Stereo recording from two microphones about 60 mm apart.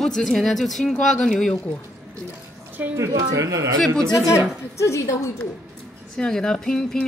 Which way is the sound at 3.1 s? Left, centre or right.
Right.